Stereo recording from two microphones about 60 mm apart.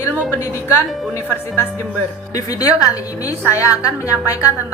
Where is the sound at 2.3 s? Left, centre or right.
Left.